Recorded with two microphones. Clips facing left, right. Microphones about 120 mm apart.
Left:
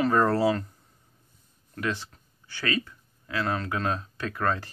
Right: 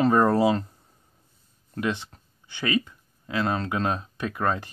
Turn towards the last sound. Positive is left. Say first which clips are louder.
# right 2 dB
turn(degrees=-15)  # may be behind; listen again after turning